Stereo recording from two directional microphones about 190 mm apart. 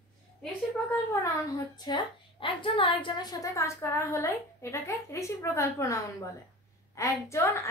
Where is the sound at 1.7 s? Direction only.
25° left (ahead or behind).